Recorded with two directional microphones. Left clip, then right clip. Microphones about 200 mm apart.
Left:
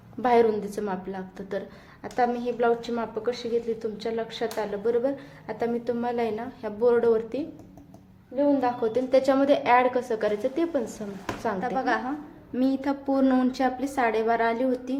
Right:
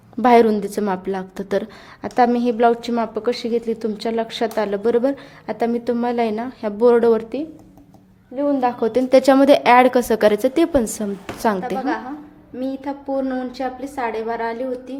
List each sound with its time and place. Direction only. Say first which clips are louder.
0.2 s a woman's voice: right 8 dB; 45° right (ahead or behind)
8.6 s a woman's voice: right 7 dB; 45° right (ahead or behind)
12.5 s a woman's voice: even; 10° left (ahead or behind)